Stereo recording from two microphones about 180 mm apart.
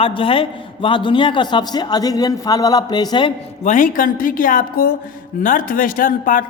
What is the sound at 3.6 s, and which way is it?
A woman's voice, 45° left (ahead or behind).